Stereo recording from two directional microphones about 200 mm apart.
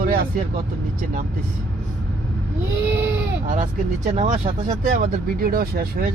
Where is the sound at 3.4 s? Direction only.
40° right (ahead or behind).